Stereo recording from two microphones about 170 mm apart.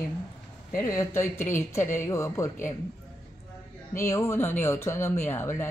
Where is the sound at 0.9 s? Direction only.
15° left (ahead or behind).